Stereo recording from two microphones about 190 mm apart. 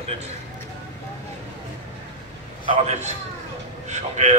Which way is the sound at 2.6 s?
35° right (ahead or behind).